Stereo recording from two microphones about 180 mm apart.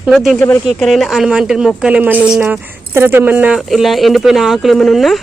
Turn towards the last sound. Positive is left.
turn(degrees=0)  # may be behind; listen again after turning